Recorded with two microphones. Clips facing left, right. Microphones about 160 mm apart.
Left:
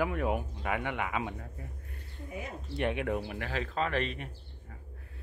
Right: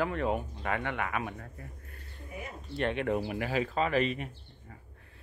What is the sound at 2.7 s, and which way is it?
Speech, 15° left (ahead or behind).